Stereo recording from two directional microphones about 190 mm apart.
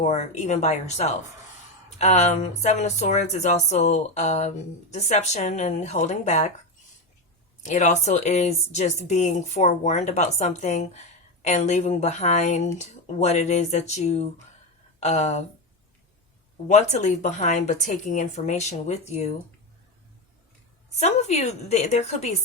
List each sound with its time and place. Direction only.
0.0 s speech: 35° left (ahead or behind)
7.6 s speech: 40° left (ahead or behind)
16.6 s speech: 40° left (ahead or behind)
21.0 s speech: 35° left (ahead or behind)